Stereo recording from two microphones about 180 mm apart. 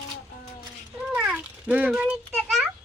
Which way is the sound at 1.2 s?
5° right (ahead or behind).